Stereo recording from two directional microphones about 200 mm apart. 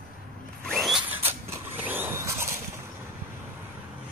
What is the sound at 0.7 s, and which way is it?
Zipper, centre (ahead or behind).